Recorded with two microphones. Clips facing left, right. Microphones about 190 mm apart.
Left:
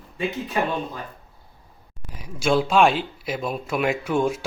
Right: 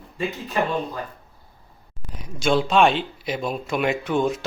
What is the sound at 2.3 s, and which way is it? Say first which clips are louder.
Speech: even; 5° left (ahead or behind).